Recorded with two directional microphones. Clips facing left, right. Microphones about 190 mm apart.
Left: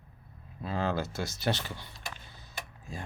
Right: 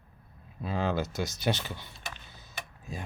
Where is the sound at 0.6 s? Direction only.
20° right (ahead or behind).